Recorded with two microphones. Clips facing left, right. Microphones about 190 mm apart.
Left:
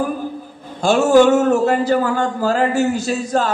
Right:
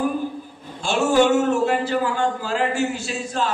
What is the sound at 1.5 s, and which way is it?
A man's voice, 40° left (ahead or behind).